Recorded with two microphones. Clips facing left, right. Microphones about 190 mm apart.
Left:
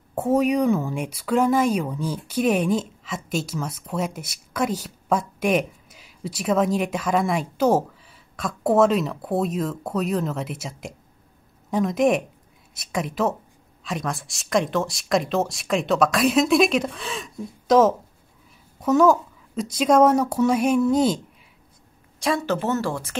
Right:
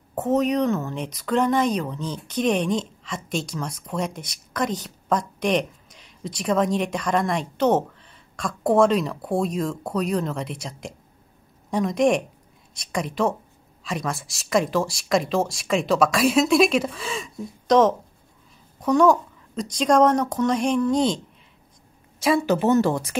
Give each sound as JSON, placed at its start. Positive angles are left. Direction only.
{"t": 0.1, "sound": "speech", "side_deg": 10}
{"t": 22.2, "sound": "speech", "side_deg": -10}